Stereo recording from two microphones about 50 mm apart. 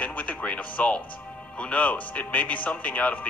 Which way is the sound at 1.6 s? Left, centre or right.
Left.